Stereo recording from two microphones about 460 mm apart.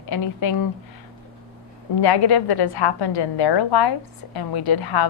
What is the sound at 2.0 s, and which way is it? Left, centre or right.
A woman's voice, left.